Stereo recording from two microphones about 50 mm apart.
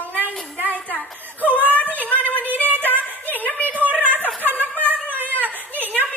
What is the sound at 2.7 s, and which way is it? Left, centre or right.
Music, left.